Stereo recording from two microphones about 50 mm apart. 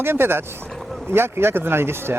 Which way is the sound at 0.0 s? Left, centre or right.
Right.